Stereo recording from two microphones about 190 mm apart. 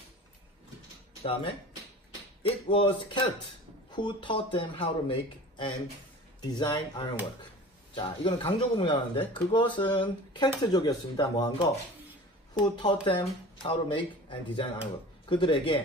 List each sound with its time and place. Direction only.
1.2 s speech: 30° left (ahead or behind)
6.4 s speech: 20° left (ahead or behind)